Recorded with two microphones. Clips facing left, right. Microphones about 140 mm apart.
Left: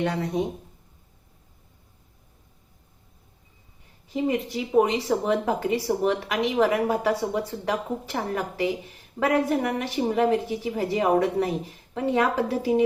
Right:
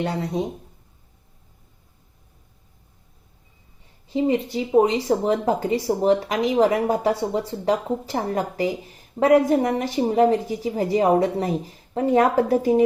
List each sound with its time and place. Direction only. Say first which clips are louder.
0.0 s speech: right 1 dB; 35° right (ahead or behind)
4.1 s speech: right 4 dB; 30° right (ahead or behind)